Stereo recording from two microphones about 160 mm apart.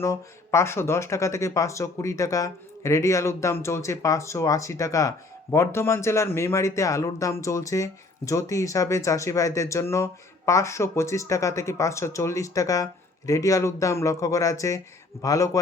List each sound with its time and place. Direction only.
0.0 s speech: 20° left (ahead or behind)